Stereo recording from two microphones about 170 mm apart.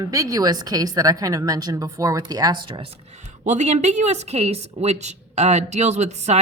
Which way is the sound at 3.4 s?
45° right (ahead or behind).